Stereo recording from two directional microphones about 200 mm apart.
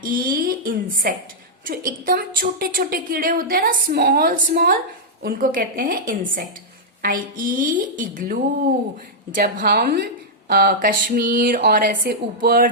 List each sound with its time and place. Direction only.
0.0 s a woman's voice: 45° right (ahead or behind)